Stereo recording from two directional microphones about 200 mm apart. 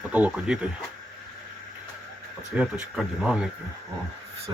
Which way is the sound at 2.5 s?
5° right (ahead or behind).